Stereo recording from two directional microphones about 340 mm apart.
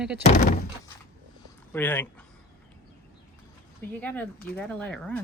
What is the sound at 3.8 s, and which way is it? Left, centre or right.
Speech, centre.